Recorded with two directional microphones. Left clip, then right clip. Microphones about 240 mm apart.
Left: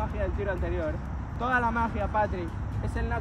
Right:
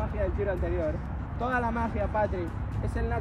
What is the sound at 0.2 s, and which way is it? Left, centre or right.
Speech, centre.